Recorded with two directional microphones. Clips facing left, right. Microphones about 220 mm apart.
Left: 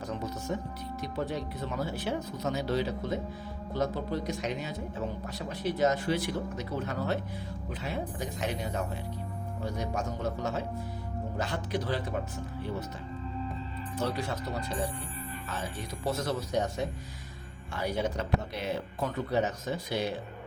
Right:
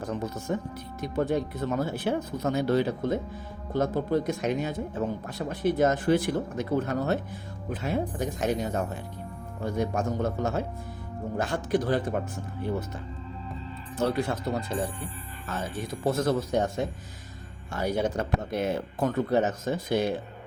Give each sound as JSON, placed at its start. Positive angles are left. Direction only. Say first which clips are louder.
{"t": 0.5, "sound": "speech", "louder": "right 3 dB", "side_deg": -55}
{"t": 13.9, "sound": "speech", "louder": "right 6 dB", "side_deg": -50}
{"t": 15.4, "sound": "speech", "louder": "right 7 dB", "side_deg": -50}